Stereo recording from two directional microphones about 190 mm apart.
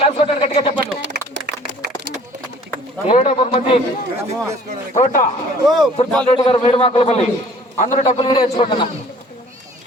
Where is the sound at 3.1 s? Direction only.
35° left (ahead or behind).